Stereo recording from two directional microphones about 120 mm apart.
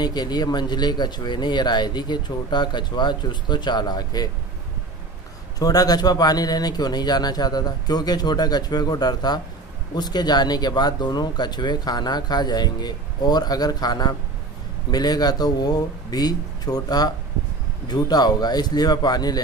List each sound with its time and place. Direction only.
0.0 s speech: 35° left (ahead or behind)
5.6 s speech: 30° left (ahead or behind)